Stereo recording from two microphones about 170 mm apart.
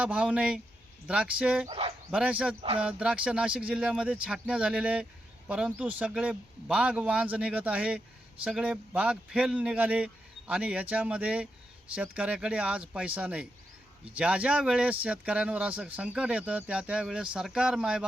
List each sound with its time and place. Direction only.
0.0 s speech: 5° right (ahead or behind)
1.6 s speech: 30° right (ahead or behind)
2.0 s speech: 10° right (ahead or behind)